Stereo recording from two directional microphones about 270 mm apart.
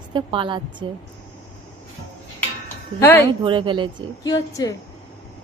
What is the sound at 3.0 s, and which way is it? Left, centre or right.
Speech, centre.